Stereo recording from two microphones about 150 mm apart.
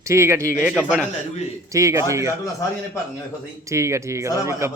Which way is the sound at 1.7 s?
20° right (ahead or behind).